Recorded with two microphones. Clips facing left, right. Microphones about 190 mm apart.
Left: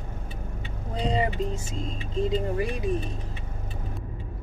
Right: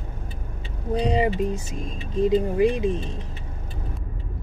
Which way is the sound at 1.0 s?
15° right (ahead or behind).